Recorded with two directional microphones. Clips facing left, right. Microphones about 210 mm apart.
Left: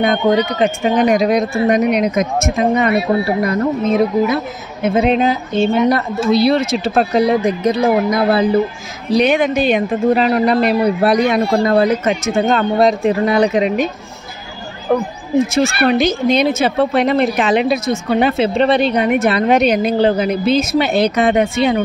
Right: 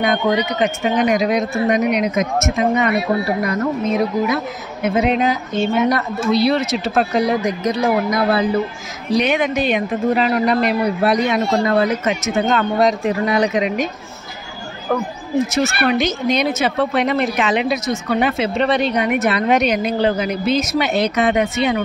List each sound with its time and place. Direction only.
0.0 s a woman's voice: 30° left (ahead or behind)
14.9 s a woman's voice: 25° left (ahead or behind)